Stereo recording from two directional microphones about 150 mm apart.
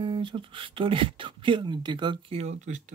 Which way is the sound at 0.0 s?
35° right (ahead or behind).